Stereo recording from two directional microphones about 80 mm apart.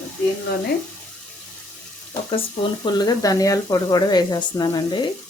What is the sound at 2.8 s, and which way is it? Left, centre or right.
Speech, left.